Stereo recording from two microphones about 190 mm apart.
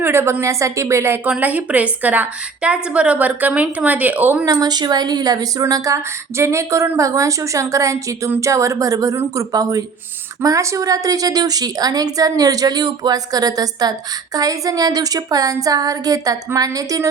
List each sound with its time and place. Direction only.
0.0 s a woman's voice: 10° right (ahead or behind)